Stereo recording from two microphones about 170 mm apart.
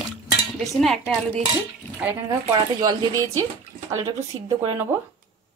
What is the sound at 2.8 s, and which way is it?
Speech, 20° right (ahead or behind).